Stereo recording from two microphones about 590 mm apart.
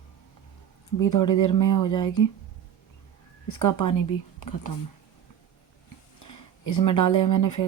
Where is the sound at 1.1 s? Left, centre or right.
Left.